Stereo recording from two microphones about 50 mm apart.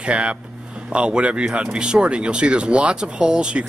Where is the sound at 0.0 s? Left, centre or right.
Right.